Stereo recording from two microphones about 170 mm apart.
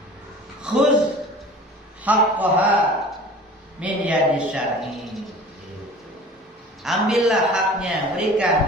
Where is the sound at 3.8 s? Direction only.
5° right (ahead or behind).